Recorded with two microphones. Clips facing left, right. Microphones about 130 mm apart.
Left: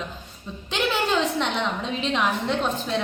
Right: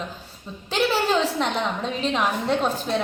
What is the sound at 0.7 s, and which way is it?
Speech, 40° right (ahead or behind).